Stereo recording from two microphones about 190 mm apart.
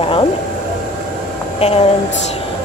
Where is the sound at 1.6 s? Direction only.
35° left (ahead or behind).